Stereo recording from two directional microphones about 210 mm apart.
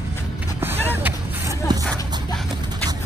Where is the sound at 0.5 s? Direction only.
10° right (ahead or behind).